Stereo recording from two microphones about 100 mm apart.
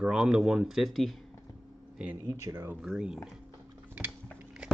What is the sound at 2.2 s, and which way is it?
Speech, 30° right (ahead or behind).